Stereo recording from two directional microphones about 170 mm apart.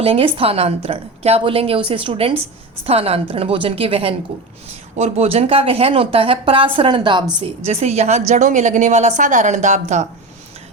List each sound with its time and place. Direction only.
0.0 s a woman's voice: 35° right (ahead or behind)